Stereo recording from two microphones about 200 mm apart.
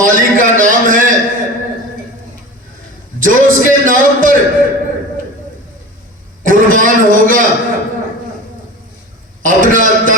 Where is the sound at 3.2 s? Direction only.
40° right (ahead or behind).